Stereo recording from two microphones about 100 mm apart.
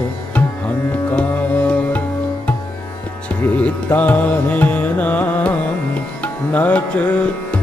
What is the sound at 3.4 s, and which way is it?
Music, 15° left (ahead or behind).